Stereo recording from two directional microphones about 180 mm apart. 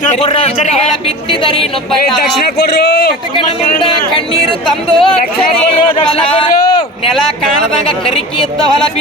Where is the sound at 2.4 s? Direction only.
65° left (ahead or behind).